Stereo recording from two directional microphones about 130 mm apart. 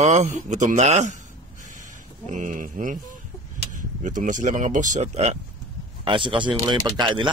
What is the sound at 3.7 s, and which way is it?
Speech, 80° right.